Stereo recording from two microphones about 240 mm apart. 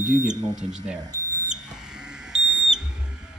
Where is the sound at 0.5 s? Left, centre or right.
Right.